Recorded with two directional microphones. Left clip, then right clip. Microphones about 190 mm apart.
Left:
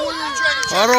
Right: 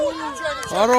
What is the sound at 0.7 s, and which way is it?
Speech, 5° right (ahead or behind).